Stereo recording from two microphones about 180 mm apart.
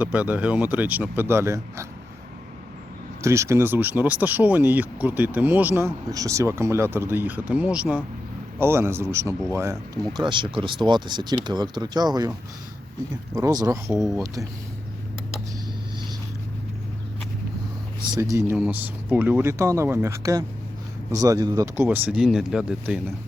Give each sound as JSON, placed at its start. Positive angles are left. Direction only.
{"t": 0.0, "sound": "speech", "side_deg": -10}
{"t": 3.2, "sound": "speech", "side_deg": -15}
{"t": 13.3, "sound": "speech", "side_deg": -20}
{"t": 13.9, "sound": "speech", "side_deg": 0}
{"t": 18.1, "sound": "speech", "side_deg": -15}